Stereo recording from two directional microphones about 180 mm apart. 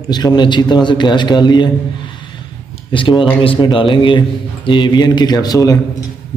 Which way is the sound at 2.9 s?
30° left (ahead or behind).